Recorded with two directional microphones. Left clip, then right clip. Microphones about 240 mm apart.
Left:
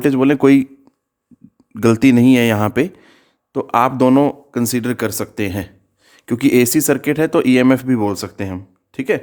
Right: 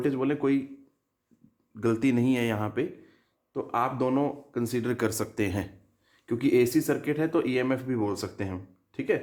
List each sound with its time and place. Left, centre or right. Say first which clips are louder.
0.0 s speech: left 14 dB; left
1.7 s speech: left 13 dB; left
6.1 s speech: left 10 dB; left